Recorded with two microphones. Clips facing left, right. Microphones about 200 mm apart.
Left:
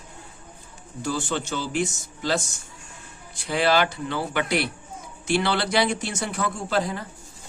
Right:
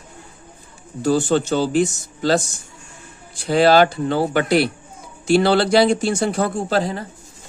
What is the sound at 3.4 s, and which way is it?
Speech, 35° right (ahead or behind).